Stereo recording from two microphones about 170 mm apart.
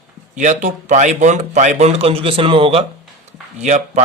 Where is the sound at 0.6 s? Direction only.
45° right (ahead or behind).